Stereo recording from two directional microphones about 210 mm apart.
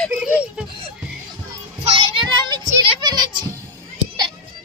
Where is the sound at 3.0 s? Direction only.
20° right (ahead or behind).